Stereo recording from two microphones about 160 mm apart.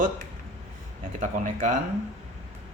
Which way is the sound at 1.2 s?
55° right (ahead or behind).